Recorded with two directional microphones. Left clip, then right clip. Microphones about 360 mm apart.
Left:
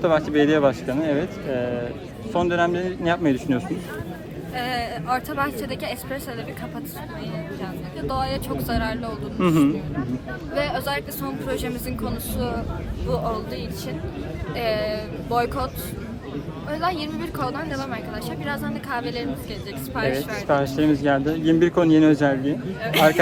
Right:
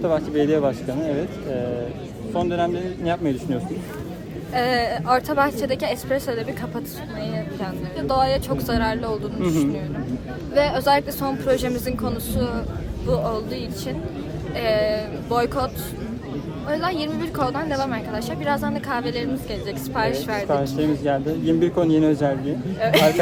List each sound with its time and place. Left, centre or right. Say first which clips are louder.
0.0 s speech: left 2 dB; left
2.3 s speech: left 2 dB; left
4.5 s speech: right 6 dB; centre
7.6 s speech: right 3 dB; centre
10.5 s a woman's voice: right 7 dB; centre
20.5 s speech: left 4 dB; left
22.8 s speech: right 3 dB; centre